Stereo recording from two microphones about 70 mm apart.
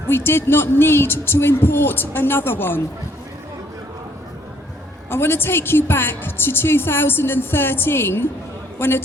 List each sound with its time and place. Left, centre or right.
0.1 s a woman's voice: left
5.0 s a woman's voice: left